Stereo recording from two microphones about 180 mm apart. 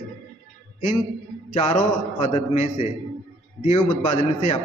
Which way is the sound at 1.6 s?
40° left (ahead or behind).